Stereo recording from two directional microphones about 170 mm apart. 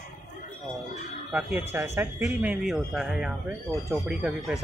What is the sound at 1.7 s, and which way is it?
Speech, 15° right (ahead or behind).